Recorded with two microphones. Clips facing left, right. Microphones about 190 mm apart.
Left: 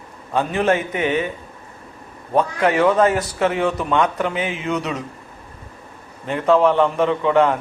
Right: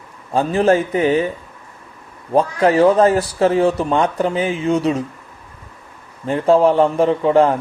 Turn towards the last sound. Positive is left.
turn(degrees=-35)  # may be behind; listen again after turning